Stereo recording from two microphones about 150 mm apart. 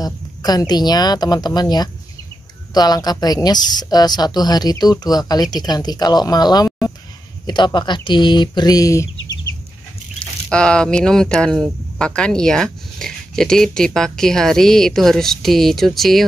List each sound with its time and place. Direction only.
0.0 s a woman's voice: 25° left (ahead or behind)
10.5 s speech: 5° left (ahead or behind)